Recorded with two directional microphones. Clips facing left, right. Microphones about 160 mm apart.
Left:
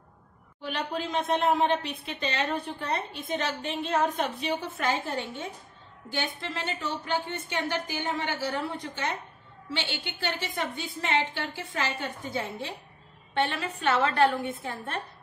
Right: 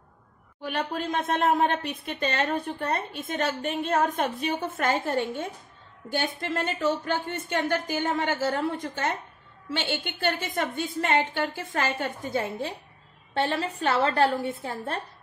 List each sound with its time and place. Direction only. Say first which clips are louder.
0.6 s a woman's voice: right 2 dB; 45° right (ahead or behind)
13.3 s a woman's voice: right 2 dB; 35° right (ahead or behind)